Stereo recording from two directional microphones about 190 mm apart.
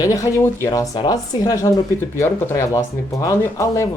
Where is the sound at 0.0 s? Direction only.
20° left (ahead or behind).